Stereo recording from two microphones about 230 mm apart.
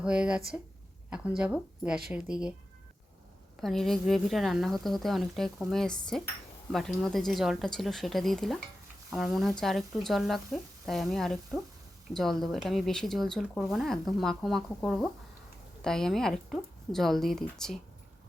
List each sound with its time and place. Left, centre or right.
0.0 s speech: centre
3.6 s speech: centre